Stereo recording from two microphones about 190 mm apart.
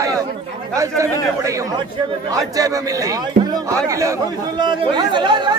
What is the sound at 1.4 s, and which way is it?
A man's voice, 15° right (ahead or behind).